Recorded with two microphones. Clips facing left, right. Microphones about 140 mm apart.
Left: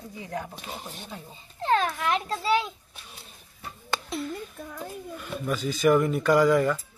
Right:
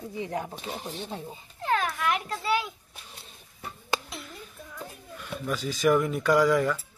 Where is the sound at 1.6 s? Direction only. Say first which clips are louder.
Left 3 dB; 25° left (ahead or behind).